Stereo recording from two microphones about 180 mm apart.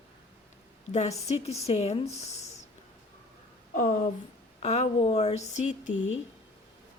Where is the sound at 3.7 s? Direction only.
45° left (ahead or behind).